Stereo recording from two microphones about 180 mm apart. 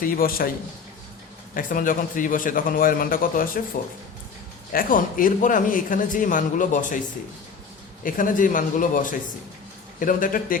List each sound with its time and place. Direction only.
0.0 s a man's voice: 55° left (ahead or behind)
1.5 s a man's voice: 50° left (ahead or behind)
4.7 s a man's voice: 50° left (ahead or behind)
8.0 s a man's voice: 50° left (ahead or behind)